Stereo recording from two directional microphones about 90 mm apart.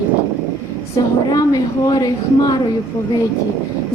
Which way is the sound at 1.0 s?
45° left (ahead or behind).